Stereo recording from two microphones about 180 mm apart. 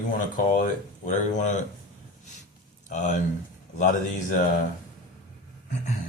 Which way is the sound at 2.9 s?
40° left (ahead or behind).